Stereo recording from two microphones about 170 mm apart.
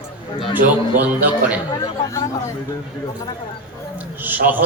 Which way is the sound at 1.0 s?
10° right (ahead or behind).